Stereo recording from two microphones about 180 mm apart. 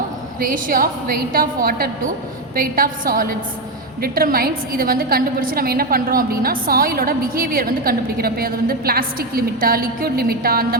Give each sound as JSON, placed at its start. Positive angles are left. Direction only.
{"t": 0.3, "sound": "a woman's voice", "side_deg": -50}